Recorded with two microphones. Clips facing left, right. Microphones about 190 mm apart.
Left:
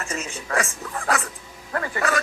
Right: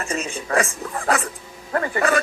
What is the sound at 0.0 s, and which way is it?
Speech, 35° right (ahead or behind).